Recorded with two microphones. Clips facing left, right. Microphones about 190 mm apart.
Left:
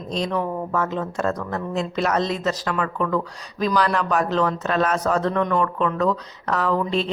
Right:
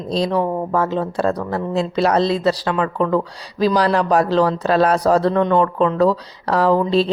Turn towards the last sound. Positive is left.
turn(degrees=-35)  # may be behind; listen again after turning